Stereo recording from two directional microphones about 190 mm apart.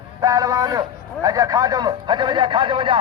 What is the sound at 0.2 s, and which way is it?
A man's voice, 20° right (ahead or behind).